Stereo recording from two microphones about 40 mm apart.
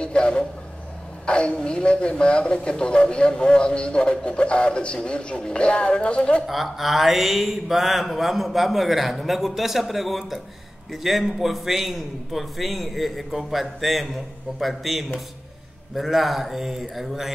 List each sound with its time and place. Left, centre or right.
0.0 s speech: left
6.4 s speech: centre